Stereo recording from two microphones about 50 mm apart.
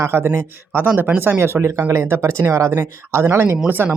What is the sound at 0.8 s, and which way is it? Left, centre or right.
Speech, right.